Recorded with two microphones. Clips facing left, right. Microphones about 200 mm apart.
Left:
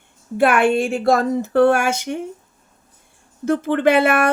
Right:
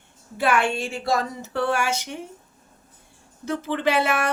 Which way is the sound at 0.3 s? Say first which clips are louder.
Left 7 dB; 55° left (ahead or behind).